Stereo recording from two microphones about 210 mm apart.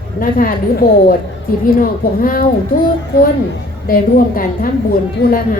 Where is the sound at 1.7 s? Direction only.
40° left (ahead or behind).